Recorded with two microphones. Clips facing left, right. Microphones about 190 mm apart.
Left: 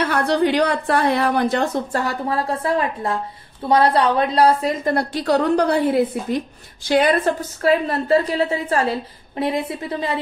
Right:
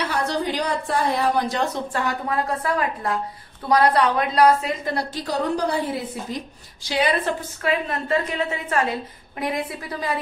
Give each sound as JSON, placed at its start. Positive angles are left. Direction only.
{"t": 0.0, "sound": "a woman's voice", "side_deg": 60}
{"t": 1.9, "sound": "a woman's voice", "side_deg": 40}
{"t": 4.9, "sound": "a woman's voice", "side_deg": 65}
{"t": 7.6, "sound": "a woman's voice", "side_deg": 35}